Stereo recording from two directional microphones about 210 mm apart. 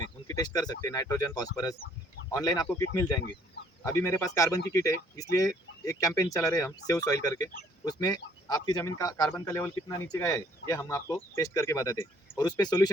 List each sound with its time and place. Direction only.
0.3 s speech: 15° left (ahead or behind)